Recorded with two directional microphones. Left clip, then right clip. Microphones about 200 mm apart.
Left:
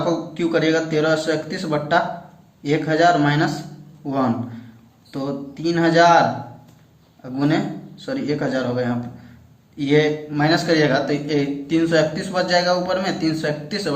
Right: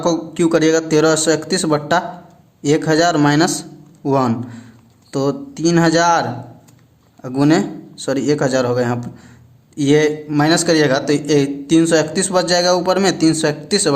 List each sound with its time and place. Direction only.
0.0 s a man's voice: 45° right (ahead or behind)